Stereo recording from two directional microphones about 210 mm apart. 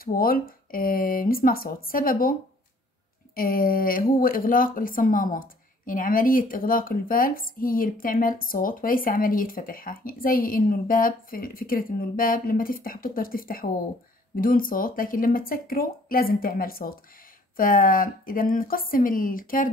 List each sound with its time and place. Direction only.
0.0 s speech: 45° left (ahead or behind)
3.3 s speech: 45° left (ahead or behind)